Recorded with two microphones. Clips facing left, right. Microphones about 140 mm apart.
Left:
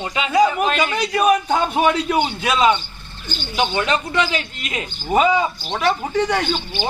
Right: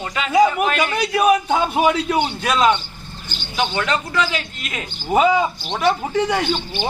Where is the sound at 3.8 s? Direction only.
20° left (ahead or behind).